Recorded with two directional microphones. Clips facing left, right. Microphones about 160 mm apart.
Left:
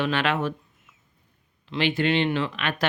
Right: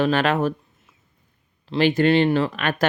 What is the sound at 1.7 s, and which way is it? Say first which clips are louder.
Speech: right 6 dB; 40° right (ahead or behind).